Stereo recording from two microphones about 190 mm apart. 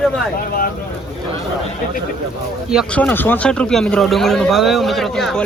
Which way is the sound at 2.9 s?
10° left (ahead or behind).